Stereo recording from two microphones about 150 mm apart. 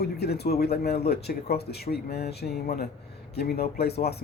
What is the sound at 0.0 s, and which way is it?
A man's voice, 90° left.